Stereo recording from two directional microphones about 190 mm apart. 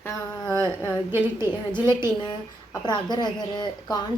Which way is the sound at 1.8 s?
20° left (ahead or behind).